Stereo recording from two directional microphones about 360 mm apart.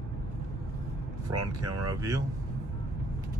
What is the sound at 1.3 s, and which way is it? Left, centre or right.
Speech, right.